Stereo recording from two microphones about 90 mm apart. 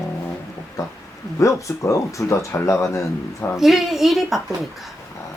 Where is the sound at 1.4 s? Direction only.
35° left (ahead or behind).